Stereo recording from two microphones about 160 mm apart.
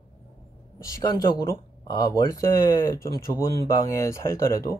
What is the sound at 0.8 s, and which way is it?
Speech, 20° left (ahead or behind).